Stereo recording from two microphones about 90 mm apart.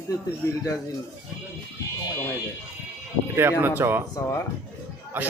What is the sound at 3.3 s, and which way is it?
Speech, 25° right (ahead or behind).